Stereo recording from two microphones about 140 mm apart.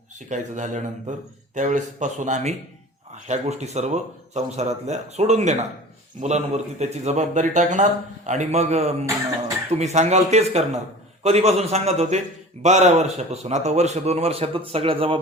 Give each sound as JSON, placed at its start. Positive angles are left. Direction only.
{"t": 0.3, "sound": "a man's voice", "side_deg": -60}